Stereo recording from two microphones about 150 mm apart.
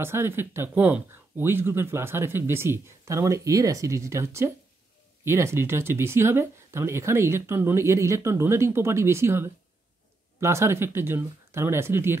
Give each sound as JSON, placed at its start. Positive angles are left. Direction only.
{"t": 0.0, "sound": "speech", "side_deg": -15}